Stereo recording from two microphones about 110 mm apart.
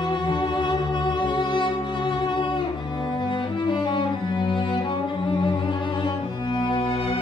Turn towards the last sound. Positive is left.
turn(degrees=50)  # may be behind; listen again after turning